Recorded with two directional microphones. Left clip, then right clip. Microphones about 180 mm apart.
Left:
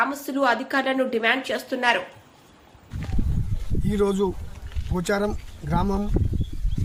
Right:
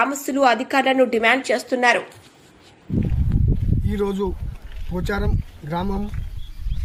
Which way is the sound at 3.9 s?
Centre (ahead or behind).